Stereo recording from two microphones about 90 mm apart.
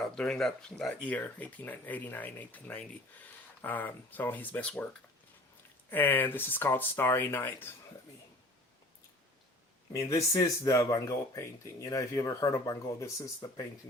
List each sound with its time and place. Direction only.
0.2 s speech: 5° left (ahead or behind)
1.0 s speech: 15° left (ahead or behind)
5.9 s speech: 20° left (ahead or behind)
9.9 s speech: 35° left (ahead or behind)